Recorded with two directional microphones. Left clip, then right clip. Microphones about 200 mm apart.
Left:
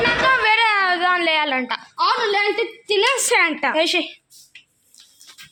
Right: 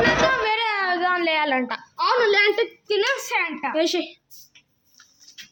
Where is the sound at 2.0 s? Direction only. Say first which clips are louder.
Even; 30° left (ahead or behind).